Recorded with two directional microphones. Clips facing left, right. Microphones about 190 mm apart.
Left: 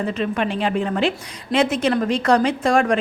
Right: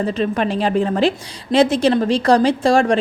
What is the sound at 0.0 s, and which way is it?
A woman's voice, 35° right (ahead or behind).